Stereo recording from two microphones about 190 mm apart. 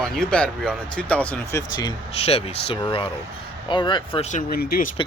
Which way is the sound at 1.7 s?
20° left (ahead or behind).